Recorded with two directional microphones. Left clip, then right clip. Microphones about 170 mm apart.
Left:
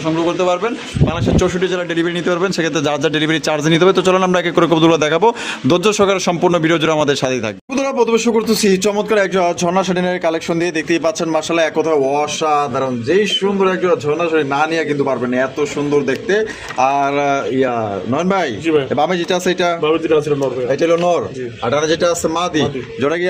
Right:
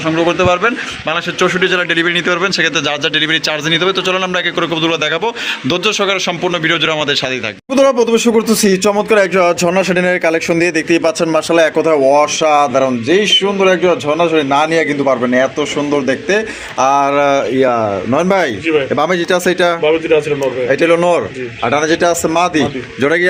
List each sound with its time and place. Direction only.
0.3 s speech: 10° right (ahead or behind)
1.4 s speech: 15° left (ahead or behind)
2.3 s a man's voice: 40° left (ahead or behind)
3.7 s a man's voice: 60° left (ahead or behind)
7.8 s speech: 15° right (ahead or behind)
16.8 s speech: 5° right (ahead or behind)
19.8 s speech: 50° left (ahead or behind)
20.7 s a man's voice: 10° right (ahead or behind)